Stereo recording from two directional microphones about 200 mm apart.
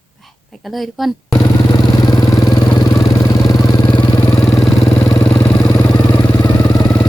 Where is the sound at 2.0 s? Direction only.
20° left (ahead or behind).